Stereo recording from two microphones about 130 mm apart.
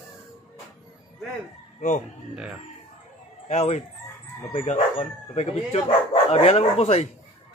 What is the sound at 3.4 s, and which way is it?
Speech, 60° left (ahead or behind).